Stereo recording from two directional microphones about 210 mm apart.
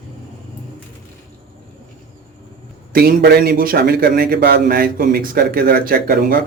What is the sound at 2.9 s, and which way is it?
A man's voice, 50° right (ahead or behind).